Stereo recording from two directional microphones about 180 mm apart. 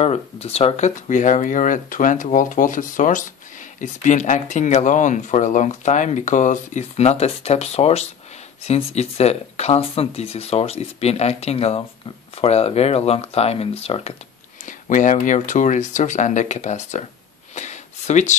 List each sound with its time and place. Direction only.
0.0 s speech: 35° left (ahead or behind)
14.7 s speech: 45° left (ahead or behind)
17.6 s a sound: 40° left (ahead or behind)